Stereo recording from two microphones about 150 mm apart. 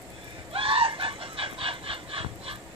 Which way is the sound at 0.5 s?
35° right (ahead or behind).